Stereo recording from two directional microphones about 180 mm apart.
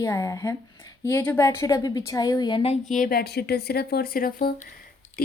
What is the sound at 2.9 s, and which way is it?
A woman's voice, 50° left (ahead or behind).